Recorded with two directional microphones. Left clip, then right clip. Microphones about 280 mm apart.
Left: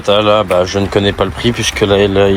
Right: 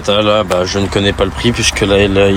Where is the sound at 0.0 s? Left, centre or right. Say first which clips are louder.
Left 1 dB; centre.